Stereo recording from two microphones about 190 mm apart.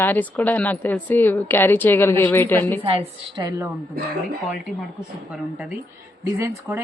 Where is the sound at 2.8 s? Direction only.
25° right (ahead or behind).